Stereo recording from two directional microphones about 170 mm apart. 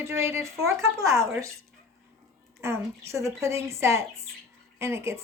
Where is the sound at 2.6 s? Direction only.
15° right (ahead or behind).